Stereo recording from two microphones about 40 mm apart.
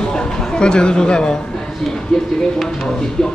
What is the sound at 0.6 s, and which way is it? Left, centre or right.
Speech, left.